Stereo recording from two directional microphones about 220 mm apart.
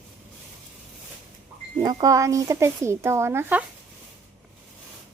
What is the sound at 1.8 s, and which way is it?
Speech, 15° right (ahead or behind).